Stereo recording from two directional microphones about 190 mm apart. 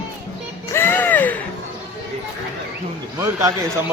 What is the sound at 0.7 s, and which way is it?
Music, 10° left (ahead or behind).